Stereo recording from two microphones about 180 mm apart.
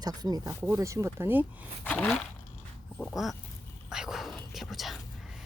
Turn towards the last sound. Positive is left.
turn(degrees=0)  # may be behind; listen again after turning